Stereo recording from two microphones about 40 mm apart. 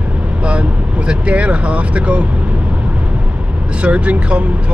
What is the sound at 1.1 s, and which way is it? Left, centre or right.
Speech, right.